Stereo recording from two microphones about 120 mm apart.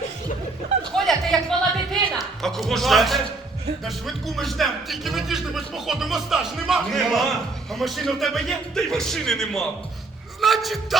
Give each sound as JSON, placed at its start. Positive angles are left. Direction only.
{"t": 0.9, "sound": "music", "side_deg": 5}
{"t": 3.8, "sound": "speech", "side_deg": 0}
{"t": 10.4, "sound": "a sound", "side_deg": 0}